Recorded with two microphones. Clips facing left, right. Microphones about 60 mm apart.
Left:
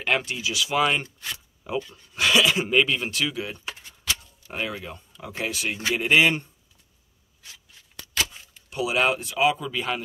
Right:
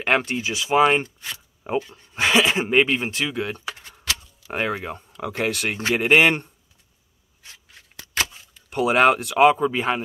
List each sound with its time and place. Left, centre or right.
0.0 s speech: right
3.3 s speech: right
8.2 s a sound: right
9.5 s speech: right